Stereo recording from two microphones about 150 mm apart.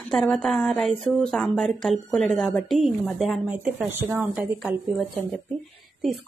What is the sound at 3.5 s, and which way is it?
A woman's voice, 10° right (ahead or behind).